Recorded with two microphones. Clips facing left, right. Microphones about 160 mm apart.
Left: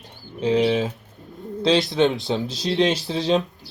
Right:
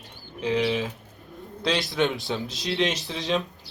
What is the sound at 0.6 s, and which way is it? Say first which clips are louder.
Speech: left 5 dB; 20° left (ahead or behind).